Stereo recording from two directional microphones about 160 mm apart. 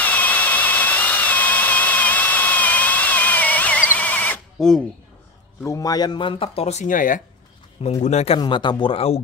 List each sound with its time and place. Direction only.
0.0 s a sound: 10° left (ahead or behind)
5.6 s speech: 20° left (ahead or behind); by 7.2 s 55° left (ahead or behind)
7.8 s speech: 45° left (ahead or behind)
8.4 s speech: 30° left (ahead or behind)